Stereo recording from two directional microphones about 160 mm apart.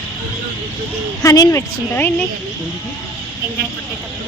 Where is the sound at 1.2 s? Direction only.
20° left (ahead or behind).